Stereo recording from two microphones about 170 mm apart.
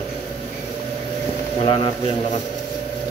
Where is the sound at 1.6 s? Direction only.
30° left (ahead or behind).